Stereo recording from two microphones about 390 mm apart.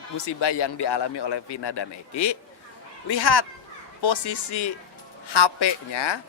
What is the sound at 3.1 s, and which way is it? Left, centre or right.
Speech, left.